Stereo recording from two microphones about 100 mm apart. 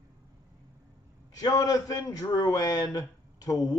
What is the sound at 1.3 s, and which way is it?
A man's voice, 40° left (ahead or behind).